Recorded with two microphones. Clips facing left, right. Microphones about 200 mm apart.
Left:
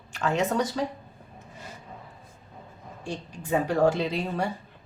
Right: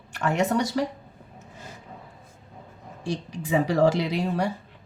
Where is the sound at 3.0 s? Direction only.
90° right; by 4.5 s 75° right (ahead or behind).